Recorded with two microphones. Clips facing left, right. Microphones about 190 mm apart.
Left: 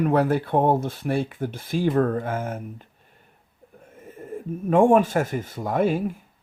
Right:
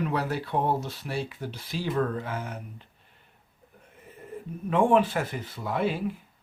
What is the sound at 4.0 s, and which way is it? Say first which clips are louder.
Speech: left 6 dB; 45° left (ahead or behind).